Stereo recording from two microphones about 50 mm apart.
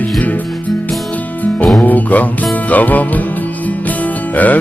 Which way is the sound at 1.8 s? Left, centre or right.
Left.